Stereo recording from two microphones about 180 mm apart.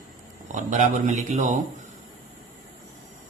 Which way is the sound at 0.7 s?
40° right (ahead or behind).